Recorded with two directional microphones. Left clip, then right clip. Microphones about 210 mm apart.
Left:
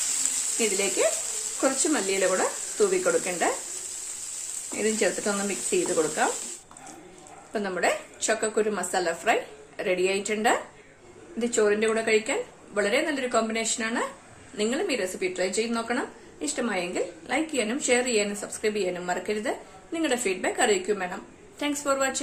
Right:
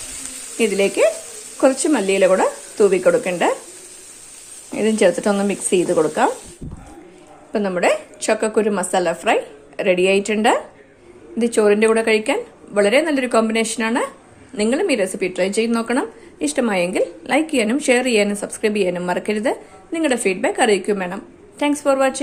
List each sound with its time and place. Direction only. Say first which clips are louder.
0.6 s speech: right 10 dB; 35° right (ahead or behind)
4.8 s speech: right 10 dB; 35° right (ahead or behind)
7.5 s speech: right 8 dB; 35° right (ahead or behind)